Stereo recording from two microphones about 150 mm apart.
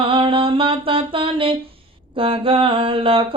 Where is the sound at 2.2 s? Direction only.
35° right (ahead or behind).